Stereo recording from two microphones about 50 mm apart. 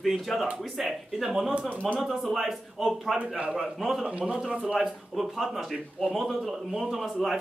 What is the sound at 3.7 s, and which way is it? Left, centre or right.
Speech, centre.